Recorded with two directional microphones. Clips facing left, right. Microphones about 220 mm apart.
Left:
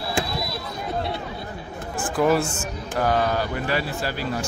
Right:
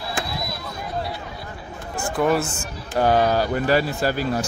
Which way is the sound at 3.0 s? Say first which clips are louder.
Right 4 dB; 30° right (ahead or behind).